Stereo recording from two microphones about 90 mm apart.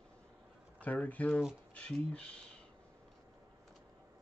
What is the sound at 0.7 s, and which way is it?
Speech, 15° left (ahead or behind).